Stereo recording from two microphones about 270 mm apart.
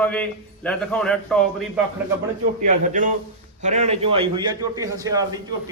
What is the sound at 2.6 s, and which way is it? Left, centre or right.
A man's voice, right.